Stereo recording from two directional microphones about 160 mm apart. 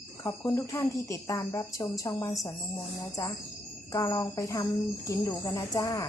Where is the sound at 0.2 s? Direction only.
20° left (ahead or behind).